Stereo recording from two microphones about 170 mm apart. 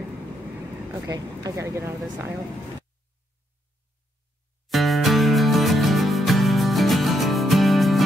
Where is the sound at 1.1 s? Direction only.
20° right (ahead or behind).